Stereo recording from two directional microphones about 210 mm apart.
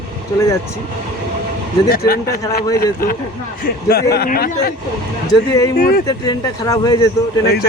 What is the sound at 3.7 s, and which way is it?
A man's voice, 45° left (ahead or behind).